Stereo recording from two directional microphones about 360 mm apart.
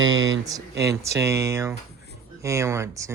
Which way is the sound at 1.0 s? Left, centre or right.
Centre.